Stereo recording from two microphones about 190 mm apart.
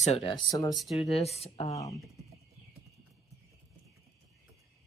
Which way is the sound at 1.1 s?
35° left (ahead or behind).